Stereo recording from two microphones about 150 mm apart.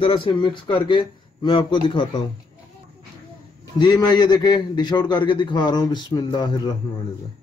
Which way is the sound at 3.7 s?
30° left (ahead or behind).